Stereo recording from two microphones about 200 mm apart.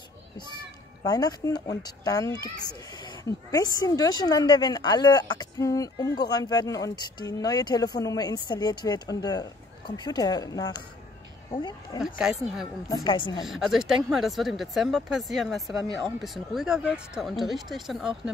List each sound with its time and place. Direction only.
1.0 s speech: 20° left (ahead or behind)
12.0 s speech: 5° right (ahead or behind)
12.8 s speech: 20° left (ahead or behind)
13.4 s speech: centre (ahead or behind)